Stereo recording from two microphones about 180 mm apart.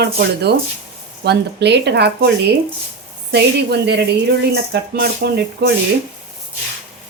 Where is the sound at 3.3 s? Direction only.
70° right (ahead or behind).